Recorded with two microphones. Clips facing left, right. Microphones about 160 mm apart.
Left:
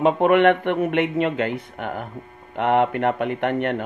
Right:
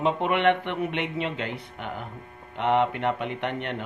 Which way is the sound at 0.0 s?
50° left (ahead or behind).